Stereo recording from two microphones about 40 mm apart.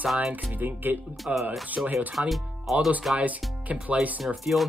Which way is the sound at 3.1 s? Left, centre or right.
Right.